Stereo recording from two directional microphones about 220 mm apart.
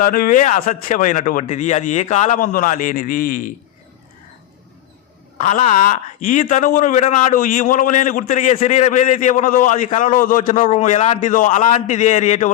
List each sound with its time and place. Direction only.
0.0 s speech: 40° left (ahead or behind)
5.4 s speech: 35° left (ahead or behind)